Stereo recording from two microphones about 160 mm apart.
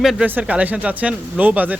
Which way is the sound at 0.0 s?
5° right (ahead or behind).